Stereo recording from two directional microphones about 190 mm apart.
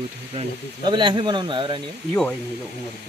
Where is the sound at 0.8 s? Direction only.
25° right (ahead or behind).